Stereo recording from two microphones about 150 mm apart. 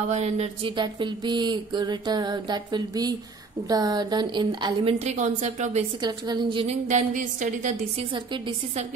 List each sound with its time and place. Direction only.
0.1 s a woman's voice: 45° right (ahead or behind)
0.7 s a sound: 30° right (ahead or behind)
4.9 s a woman's voice: 50° right (ahead or behind)
5.9 s a sound: 30° right (ahead or behind)
6.6 s a woman's voice: 50° right (ahead or behind)
8.0 s a woman's voice: 35° right (ahead or behind)